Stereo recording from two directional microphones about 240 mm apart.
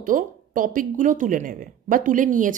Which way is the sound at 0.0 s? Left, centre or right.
Right.